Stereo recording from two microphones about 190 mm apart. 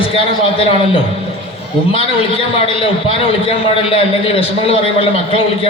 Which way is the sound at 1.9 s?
30° left (ahead or behind).